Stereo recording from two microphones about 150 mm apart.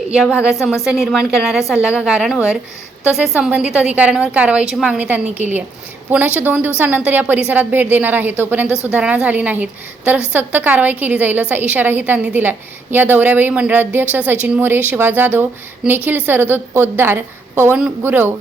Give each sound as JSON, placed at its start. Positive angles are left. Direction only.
{"t": 0.3, "sound": "a woman's voice", "side_deg": -5}